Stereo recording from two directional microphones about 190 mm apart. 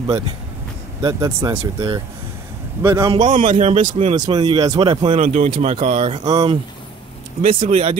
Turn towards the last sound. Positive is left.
turn(degrees=-30)  # may be behind; listen again after turning